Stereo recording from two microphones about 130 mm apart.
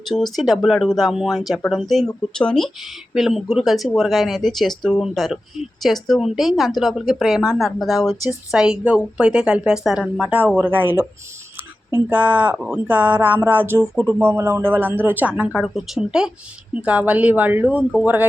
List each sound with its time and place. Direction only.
0.1 s a woman's voice: centre (ahead or behind)
15.5 s a woman's voice: centre (ahead or behind)